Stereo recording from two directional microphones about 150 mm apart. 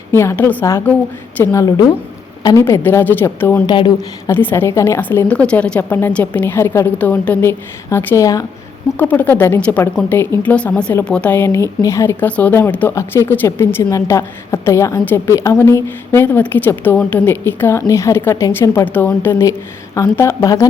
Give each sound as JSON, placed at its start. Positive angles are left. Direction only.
{"t": 0.1, "sound": "a woman's voice", "side_deg": 15}
{"t": 3.7, "sound": "speech", "side_deg": 30}
{"t": 4.3, "sound": "a woman's voice", "side_deg": 15}